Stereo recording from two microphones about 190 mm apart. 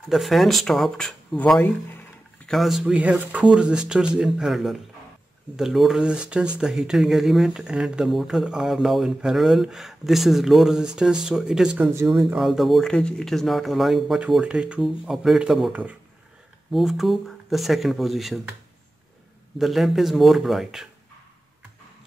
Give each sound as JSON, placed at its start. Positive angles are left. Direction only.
{"t": 0.1, "sound": "speech", "side_deg": 0}
{"t": 19.6, "sound": "speech", "side_deg": 0}